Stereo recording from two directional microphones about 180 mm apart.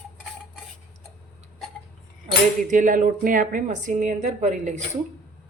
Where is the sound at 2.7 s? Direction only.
45° right (ahead or behind).